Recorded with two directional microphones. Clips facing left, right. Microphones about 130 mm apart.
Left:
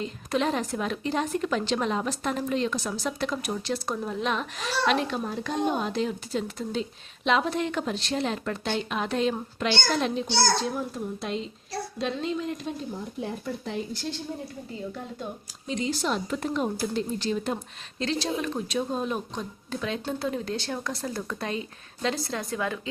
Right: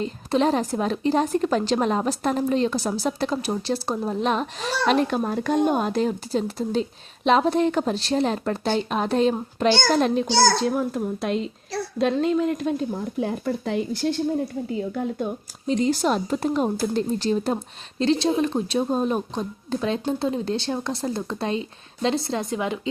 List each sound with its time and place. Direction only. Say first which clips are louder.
0.0 s speech: right 5 dB; 35° right (ahead or behind)
10.2 s a child's voice: right 6 dB; 90° right; by 12.7 s 55° right (ahead or behind)
13.1 s speech: right 8 dB; 80° right
15.2 s a woman's voice: right 9 dB; 45° right (ahead or behind); by 22.9 s 20° right (ahead or behind)